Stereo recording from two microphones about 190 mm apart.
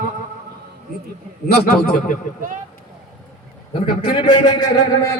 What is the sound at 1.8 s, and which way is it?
Speech, 55° left (ahead or behind).